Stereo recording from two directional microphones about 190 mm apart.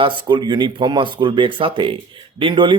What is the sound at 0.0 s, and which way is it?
A man's voice, 25° right (ahead or behind).